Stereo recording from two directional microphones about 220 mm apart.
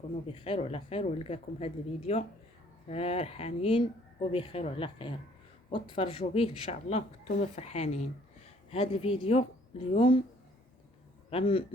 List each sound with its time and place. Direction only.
0.3 s speech: 25° left (ahead or behind)
11.3 s speech: 25° left (ahead or behind)